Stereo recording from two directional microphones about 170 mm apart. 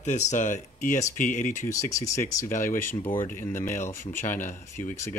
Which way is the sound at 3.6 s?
45° left (ahead or behind).